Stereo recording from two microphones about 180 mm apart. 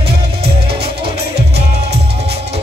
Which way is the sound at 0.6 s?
30° right (ahead or behind).